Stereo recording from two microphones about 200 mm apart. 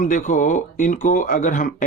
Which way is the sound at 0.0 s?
40° left (ahead or behind).